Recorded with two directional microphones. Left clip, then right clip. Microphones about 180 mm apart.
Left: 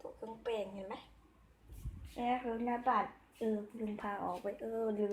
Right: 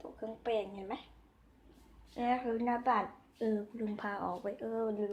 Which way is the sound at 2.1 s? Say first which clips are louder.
Right 3 dB; centre (ahead or behind).